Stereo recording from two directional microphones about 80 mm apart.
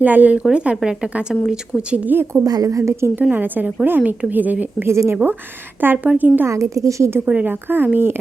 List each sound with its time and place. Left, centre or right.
0.0 s a woman's voice: centre
2.0 s a woman's voice: right
2.4 s a woman's voice: right
3.3 s a woman's voice: right
4.9 s a woman's voice: right
5.1 s a woman's voice: centre
6.5 s a woman's voice: right
7.3 s a woman's voice: right